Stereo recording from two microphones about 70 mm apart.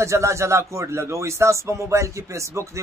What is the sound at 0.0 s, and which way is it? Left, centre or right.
A man's voice, right.